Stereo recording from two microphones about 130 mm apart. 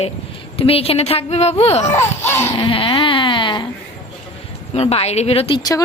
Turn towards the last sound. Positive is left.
turn(degrees=45)  # may be behind; listen again after turning